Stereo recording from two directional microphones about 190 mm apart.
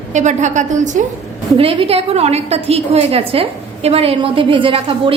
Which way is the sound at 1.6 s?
30° right (ahead or behind).